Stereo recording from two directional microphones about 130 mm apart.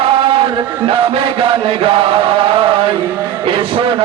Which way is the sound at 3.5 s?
45° right (ahead or behind).